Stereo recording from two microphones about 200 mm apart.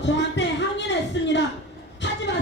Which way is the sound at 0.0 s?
60° left (ahead or behind).